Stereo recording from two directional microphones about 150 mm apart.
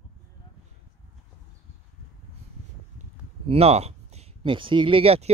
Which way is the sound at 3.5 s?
45° right (ahead or behind).